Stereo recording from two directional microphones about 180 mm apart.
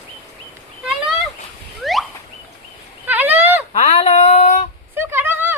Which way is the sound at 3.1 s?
10° right (ahead or behind).